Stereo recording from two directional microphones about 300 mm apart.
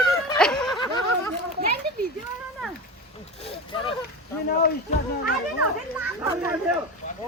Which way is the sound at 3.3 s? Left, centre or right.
Centre.